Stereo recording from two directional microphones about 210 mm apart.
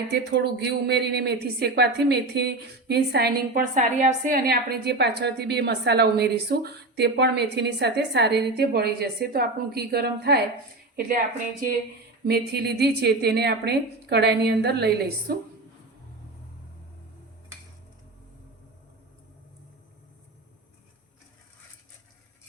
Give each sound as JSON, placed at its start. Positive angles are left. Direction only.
{"t": 0.1, "sound": "speech", "side_deg": -55}
{"t": 12.3, "sound": "speech", "side_deg": -50}